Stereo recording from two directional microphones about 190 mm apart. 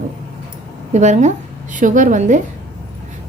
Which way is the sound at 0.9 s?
40° right (ahead or behind).